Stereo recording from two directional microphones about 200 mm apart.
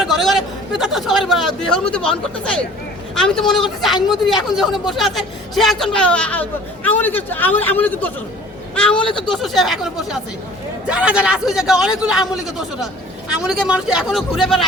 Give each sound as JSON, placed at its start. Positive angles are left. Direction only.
{"t": 0.0, "sound": "speech", "side_deg": 0}
{"t": 9.0, "sound": "speech", "side_deg": 25}
{"t": 9.3, "sound": "speech", "side_deg": 0}